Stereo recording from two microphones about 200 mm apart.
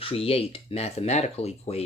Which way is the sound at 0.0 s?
30° left (ahead or behind).